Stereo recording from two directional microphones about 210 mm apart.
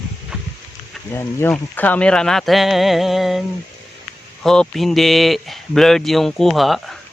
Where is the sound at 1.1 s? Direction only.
10° left (ahead or behind).